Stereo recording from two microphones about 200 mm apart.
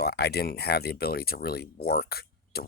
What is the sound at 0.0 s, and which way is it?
Speech, 55° left (ahead or behind).